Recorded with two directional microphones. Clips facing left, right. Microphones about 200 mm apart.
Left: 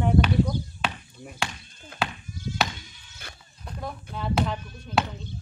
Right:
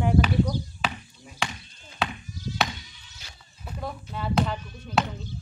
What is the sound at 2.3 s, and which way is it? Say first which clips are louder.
Sheep: even; 55° left (ahead or behind).